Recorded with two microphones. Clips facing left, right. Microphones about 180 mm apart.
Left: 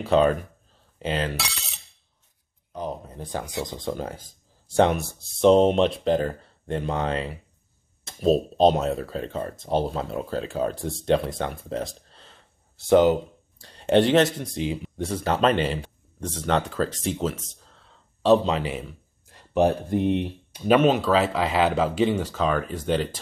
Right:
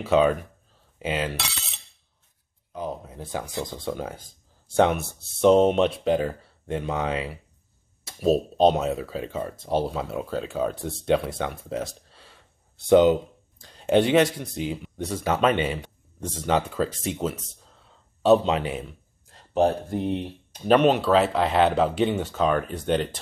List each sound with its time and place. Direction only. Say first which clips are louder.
0.0 s speech: even; centre (ahead or behind)
2.7 s a sound: even; 5° right (ahead or behind)
3.7 s speech: left 1 dB; 5° right (ahead or behind)
13.6 s speech: left 1 dB; centre (ahead or behind)
19.6 s speech: left 1 dB; 15° left (ahead or behind)
20.6 s speech: even; 5° left (ahead or behind)